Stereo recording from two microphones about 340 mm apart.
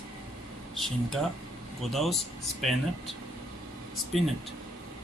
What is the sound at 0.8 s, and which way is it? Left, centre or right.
Speech, centre.